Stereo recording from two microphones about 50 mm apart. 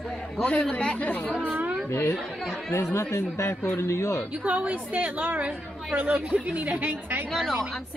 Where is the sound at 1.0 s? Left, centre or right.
Left.